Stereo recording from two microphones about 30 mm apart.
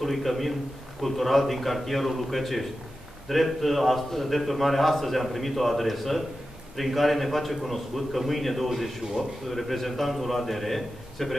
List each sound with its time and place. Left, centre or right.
0.0 s a man's voice: centre
9.0 s a man's voice: right
9.5 s a man's voice: centre